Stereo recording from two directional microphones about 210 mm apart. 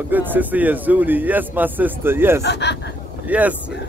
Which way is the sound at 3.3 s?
5° right (ahead or behind).